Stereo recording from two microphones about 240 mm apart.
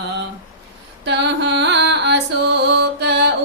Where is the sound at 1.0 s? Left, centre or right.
Right.